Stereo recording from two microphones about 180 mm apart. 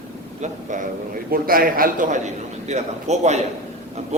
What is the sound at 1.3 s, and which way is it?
A man's voice, 55° right (ahead or behind).